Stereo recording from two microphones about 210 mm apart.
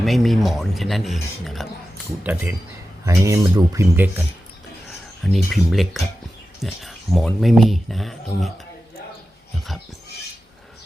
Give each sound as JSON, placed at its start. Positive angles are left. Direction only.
{"t": 0.0, "sound": "speech", "side_deg": 0}